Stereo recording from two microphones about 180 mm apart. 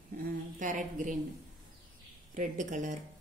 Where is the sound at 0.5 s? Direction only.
45° right (ahead or behind).